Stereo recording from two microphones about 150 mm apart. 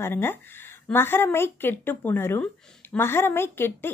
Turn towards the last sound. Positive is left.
turn(degrees=15)  # may be behind; listen again after turning